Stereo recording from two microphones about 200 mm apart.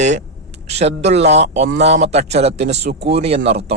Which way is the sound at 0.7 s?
35° right (ahead or behind).